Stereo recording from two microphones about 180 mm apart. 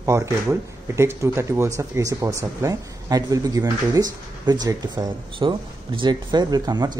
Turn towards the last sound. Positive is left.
turn(degrees=-20)  # may be behind; listen again after turning